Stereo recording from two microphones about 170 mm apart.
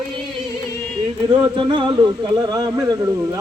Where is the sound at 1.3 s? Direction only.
30° right (ahead or behind).